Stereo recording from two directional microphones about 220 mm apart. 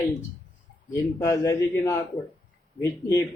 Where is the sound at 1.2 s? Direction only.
15° left (ahead or behind).